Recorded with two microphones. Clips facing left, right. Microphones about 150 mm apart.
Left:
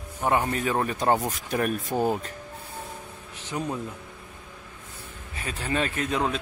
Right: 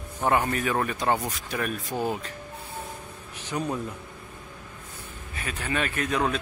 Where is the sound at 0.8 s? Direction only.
40° left (ahead or behind).